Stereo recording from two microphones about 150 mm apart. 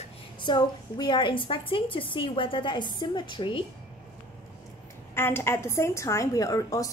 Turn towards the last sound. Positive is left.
turn(degrees=20)  # may be behind; listen again after turning